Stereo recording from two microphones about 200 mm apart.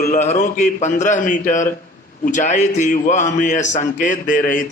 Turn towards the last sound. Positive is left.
turn(degrees=40)  # may be behind; listen again after turning